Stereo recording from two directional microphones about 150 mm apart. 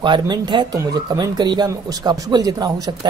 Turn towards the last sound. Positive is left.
turn(degrees=-25)  # may be behind; listen again after turning